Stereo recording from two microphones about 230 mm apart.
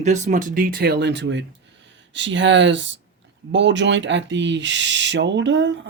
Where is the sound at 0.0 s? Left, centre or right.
Right.